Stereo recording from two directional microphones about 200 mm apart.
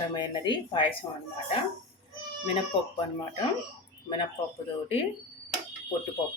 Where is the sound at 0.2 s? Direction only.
25° left (ahead or behind).